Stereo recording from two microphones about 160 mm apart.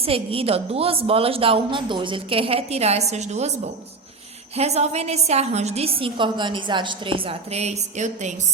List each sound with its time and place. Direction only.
0.0 s a woman's voice: 35° right (ahead or behind)